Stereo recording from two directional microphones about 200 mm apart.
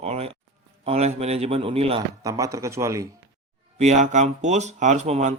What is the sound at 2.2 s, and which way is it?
Speech, 15° right (ahead or behind).